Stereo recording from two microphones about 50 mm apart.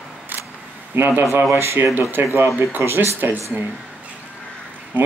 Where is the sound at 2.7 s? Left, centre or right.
Right.